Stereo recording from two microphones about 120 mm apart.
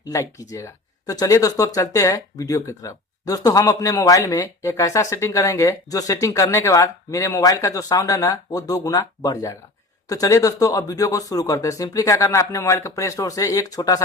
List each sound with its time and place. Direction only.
0.0 s speech: 25° left (ahead or behind)